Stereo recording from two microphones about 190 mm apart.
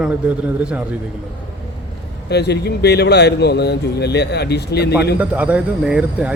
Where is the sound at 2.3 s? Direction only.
60° left (ahead or behind).